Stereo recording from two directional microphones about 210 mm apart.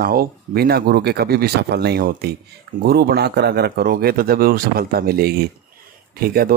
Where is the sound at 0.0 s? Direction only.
45° right (ahead or behind).